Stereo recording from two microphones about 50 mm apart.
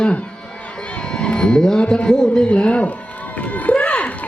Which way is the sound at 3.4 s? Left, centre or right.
Left.